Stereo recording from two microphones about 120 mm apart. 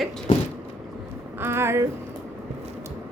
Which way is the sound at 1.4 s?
20° right (ahead or behind).